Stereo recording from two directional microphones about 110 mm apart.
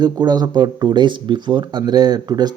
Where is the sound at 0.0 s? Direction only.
40° right (ahead or behind).